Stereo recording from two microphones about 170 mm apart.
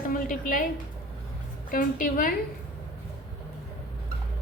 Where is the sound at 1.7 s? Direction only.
55° left (ahead or behind).